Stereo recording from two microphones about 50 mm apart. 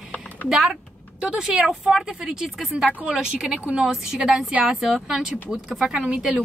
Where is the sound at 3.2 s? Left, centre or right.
Centre.